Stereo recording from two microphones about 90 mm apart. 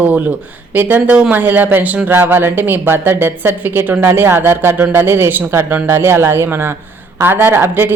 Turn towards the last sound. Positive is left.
turn(degrees=-25)  # may be behind; listen again after turning